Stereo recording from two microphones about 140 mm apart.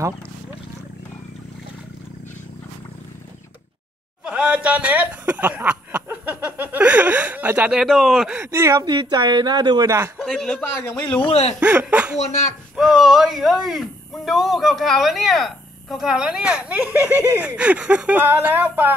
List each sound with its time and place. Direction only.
4.2 s a sound: 10° right (ahead or behind)
8.4 s speech: 20° right (ahead or behind)
8.8 s speech: 30° right (ahead or behind)
10.1 s a man's voice: 5° left (ahead or behind)
10.8 s a man's voice: 30° left (ahead or behind)
11.2 s speech: 50° left (ahead or behind)
11.6 s speech: 10° right (ahead or behind)